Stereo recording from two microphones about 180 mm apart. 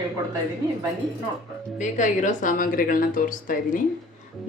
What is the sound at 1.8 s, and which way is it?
Speech, 45° left (ahead or behind).